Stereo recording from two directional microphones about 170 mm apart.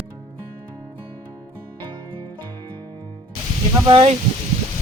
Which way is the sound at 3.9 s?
30° right (ahead or behind).